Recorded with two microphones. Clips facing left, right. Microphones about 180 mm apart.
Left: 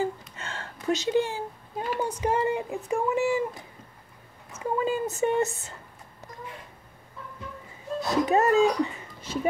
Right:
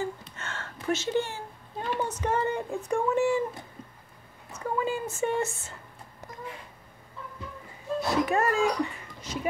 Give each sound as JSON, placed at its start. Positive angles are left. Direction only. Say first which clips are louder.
{"t": 0.4, "sound": "speech", "louder": "left 1 dB", "side_deg": 15}
{"t": 4.6, "sound": "speech", "louder": "left 3 dB", "side_deg": 20}
{"t": 8.1, "sound": "speech", "louder": "left 4 dB", "side_deg": 20}